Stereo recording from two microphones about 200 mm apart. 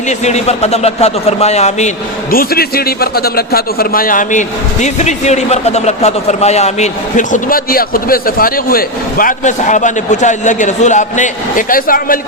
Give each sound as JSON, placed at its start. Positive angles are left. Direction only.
{"t": 0.1, "sound": "a man's voice", "side_deg": 35}
{"t": 2.3, "sound": "a man's voice", "side_deg": 50}